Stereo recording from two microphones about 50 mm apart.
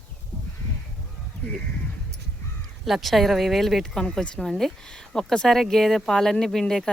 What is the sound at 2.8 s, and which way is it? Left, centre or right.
Speech, centre.